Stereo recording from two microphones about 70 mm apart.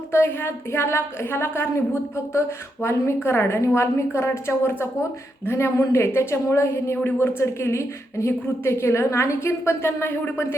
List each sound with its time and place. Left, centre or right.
0.1 s a woman's voice: left